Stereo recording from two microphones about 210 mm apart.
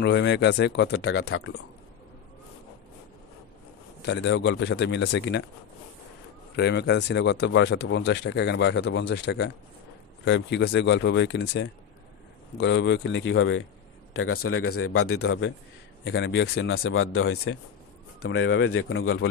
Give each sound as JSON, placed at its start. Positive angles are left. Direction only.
{"t": 0.0, "sound": "speech", "side_deg": 55}
{"t": 4.0, "sound": "speech", "side_deg": 55}
{"t": 6.5, "sound": "speech", "side_deg": 55}
{"t": 14.1, "sound": "speech", "side_deg": 85}
{"t": 15.2, "sound": "speech", "side_deg": 60}
{"t": 18.2, "sound": "speech", "side_deg": 70}